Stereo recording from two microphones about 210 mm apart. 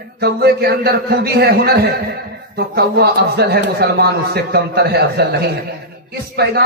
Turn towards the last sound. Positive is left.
turn(degrees=-50)  # may be behind; listen again after turning